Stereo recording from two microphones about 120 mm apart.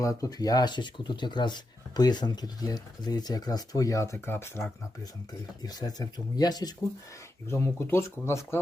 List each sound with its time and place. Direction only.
0.0 s speech: 30° left (ahead or behind)
5.6 s speech: 35° left (ahead or behind)
7.4 s speech: 25° left (ahead or behind)